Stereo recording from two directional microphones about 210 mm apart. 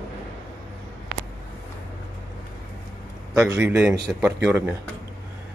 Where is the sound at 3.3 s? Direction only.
10° right (ahead or behind).